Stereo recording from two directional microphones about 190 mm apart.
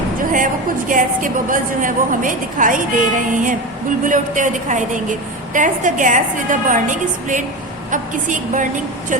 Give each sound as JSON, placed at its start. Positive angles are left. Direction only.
{"t": 0.9, "sound": "a woman's voice", "side_deg": -45}